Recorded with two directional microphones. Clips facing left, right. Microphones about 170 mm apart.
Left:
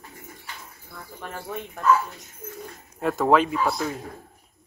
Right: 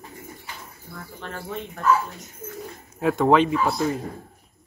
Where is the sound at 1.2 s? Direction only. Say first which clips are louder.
Even; 10° left (ahead or behind).